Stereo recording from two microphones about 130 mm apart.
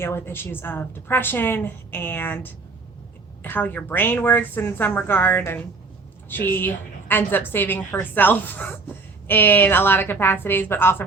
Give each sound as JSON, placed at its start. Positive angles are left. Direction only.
{"t": 0.0, "sound": "a woman's voice", "side_deg": 20}